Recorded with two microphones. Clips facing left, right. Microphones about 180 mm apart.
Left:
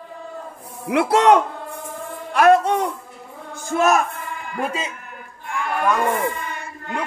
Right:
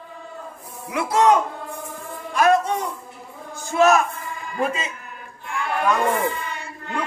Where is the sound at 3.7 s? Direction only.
60° left (ahead or behind).